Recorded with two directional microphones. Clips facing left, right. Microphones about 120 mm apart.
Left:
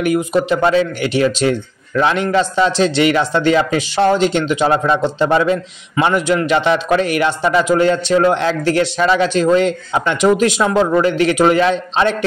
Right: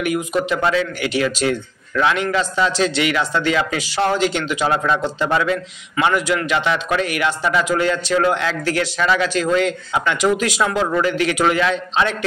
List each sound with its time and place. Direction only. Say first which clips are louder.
0.0 s a man's voice: left 5 dB; 35° left (ahead or behind)